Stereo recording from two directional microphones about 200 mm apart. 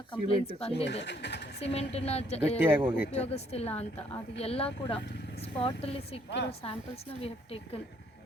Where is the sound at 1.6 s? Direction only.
30° left (ahead or behind).